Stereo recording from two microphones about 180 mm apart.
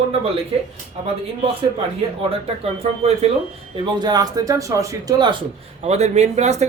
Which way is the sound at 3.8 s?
20° right (ahead or behind).